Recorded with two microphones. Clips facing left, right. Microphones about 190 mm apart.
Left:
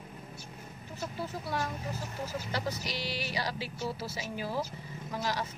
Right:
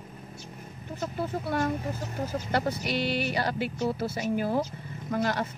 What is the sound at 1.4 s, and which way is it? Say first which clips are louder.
Speech: right 7 dB; 55° right (ahead or behind).